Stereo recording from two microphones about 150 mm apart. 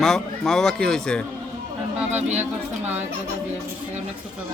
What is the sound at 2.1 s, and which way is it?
Speech, 50° right (ahead or behind).